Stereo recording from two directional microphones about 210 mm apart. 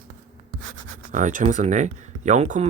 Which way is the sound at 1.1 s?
35° right (ahead or behind).